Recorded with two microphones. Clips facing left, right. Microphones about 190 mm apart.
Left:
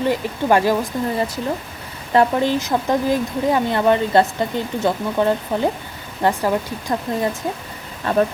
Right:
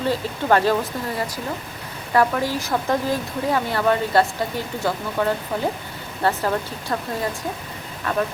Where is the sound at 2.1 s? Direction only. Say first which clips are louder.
Left 4 dB; 25° left (ahead or behind).